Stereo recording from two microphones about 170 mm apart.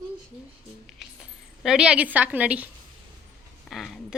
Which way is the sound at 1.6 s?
5° right (ahead or behind).